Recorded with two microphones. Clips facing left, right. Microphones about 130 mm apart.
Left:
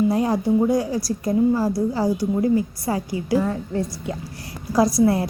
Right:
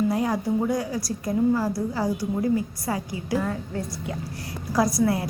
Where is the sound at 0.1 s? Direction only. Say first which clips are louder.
Left 4 dB; 30° left (ahead or behind).